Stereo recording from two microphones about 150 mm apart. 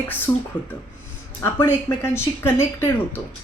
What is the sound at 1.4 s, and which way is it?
A woman's voice, 15° left (ahead or behind).